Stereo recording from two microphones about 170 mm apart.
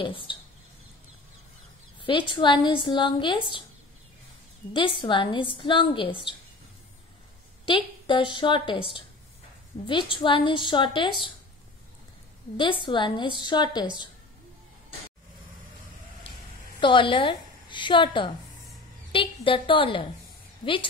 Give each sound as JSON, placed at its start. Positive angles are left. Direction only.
{"t": 0.0, "sound": "a woman's voice", "side_deg": 30}
{"t": 2.0, "sound": "a woman's voice", "side_deg": 30}
{"t": 4.7, "sound": "a woman's voice", "side_deg": 30}
{"t": 7.6, "sound": "a woman's voice", "side_deg": 30}
{"t": 9.8, "sound": "a woman's voice", "side_deg": 30}
{"t": 12.8, "sound": "a woman's voice", "side_deg": 30}
{"t": 16.8, "sound": "a woman's voice", "side_deg": 30}